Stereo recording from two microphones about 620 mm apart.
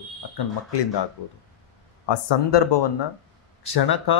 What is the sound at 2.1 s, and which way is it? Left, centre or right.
Speech, left.